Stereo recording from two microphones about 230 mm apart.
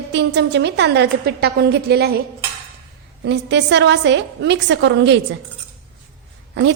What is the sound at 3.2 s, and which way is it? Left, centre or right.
A woman's voice, right.